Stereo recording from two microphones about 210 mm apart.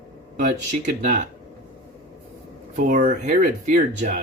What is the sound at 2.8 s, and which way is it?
Speech, 40° right (ahead or behind).